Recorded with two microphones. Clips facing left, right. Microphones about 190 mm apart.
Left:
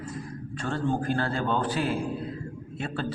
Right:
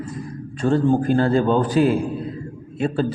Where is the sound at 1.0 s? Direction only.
20° right (ahead or behind).